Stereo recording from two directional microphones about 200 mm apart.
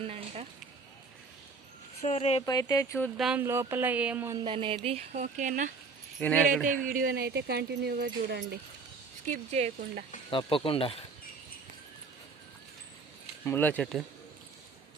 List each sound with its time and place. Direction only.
0.0 s a sound: 30° right (ahead or behind)
2.0 s speech: 35° left (ahead or behind)
2.5 s speech: 20° left (ahead or behind)
3.2 s speech: centre (ahead or behind)
3.4 s speech: 15° right (ahead or behind)
4.4 s speech: 25° right (ahead or behind)
6.1 s speech: 5° left (ahead or behind)
6.8 s speech: 45° right (ahead or behind)
9.2 s speech: 35° right (ahead or behind)
10.2 s speech: 25° left (ahead or behind)
13.4 s speech: 10° left (ahead or behind)